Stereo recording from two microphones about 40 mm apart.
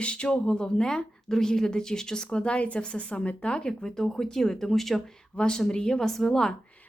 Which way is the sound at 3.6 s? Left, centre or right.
Centre.